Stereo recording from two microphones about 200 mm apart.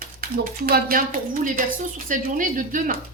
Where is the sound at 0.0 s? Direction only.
45° right (ahead or behind).